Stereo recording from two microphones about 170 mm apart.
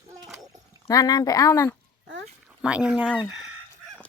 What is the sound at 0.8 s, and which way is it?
Speech, 20° left (ahead or behind).